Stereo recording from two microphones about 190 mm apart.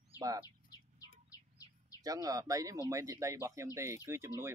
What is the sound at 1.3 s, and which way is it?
Bird, 20° left (ahead or behind).